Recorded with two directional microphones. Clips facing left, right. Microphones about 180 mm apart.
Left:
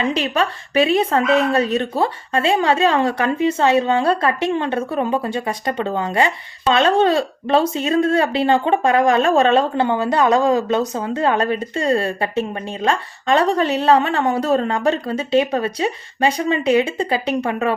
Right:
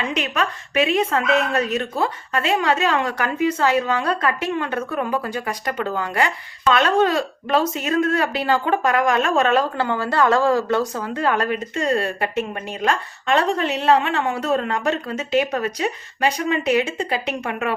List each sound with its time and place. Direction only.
0.0 s a woman's voice: 30° left (ahead or behind)